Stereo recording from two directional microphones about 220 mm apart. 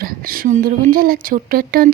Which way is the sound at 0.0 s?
40° right (ahead or behind).